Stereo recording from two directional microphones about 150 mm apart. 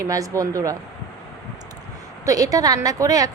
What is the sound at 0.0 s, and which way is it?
Speech, 20° right (ahead or behind).